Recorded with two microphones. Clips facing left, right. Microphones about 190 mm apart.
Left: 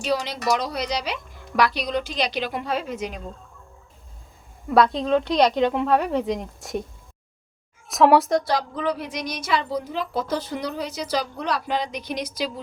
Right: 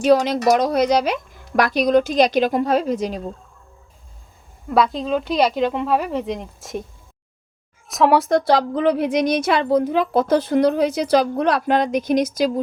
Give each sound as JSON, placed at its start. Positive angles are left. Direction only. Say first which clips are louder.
{"t": 0.1, "sound": "a woman's voice", "louder": "right 8 dB", "side_deg": -50}
{"t": 4.7, "sound": "a woman's voice", "louder": "even", "side_deg": 0}
{"t": 7.9, "sound": "a woman's voice", "louder": "right 1 dB", "side_deg": 0}
{"t": 8.4, "sound": "speech", "louder": "right 7 dB", "side_deg": -60}